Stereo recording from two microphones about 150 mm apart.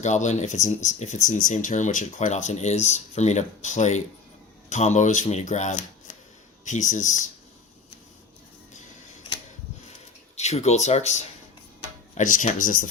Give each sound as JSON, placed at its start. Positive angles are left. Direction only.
{"t": 0.0, "sound": "speech", "side_deg": 50}
{"t": 10.3, "sound": "speech", "side_deg": 45}